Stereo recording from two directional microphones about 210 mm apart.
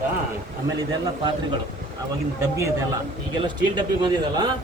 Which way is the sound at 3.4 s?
20° right (ahead or behind).